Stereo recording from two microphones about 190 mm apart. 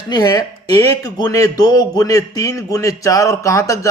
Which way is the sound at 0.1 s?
20° left (ahead or behind).